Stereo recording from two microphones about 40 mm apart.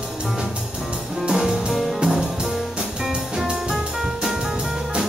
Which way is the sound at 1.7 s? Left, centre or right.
Centre.